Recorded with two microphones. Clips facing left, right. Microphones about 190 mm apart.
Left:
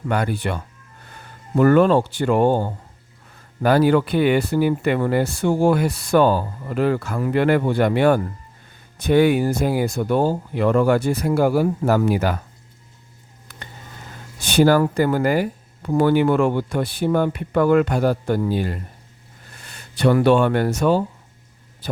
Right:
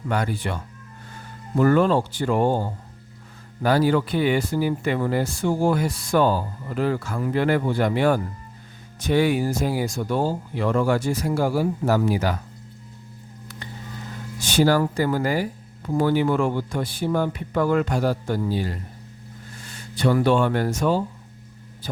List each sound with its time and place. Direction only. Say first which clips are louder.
0.1 s speech: left 3 dB; 60° left (ahead or behind)
14.3 s speech: left 4 dB; 60° left (ahead or behind)